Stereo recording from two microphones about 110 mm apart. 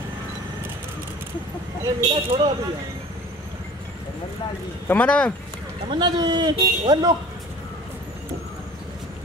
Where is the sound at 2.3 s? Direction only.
60° right (ahead or behind).